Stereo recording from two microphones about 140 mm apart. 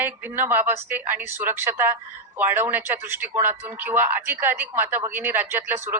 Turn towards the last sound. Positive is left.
turn(degrees=-15)  # may be behind; listen again after turning